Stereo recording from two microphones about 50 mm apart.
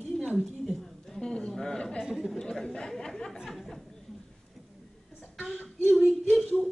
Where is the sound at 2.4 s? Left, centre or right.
Centre.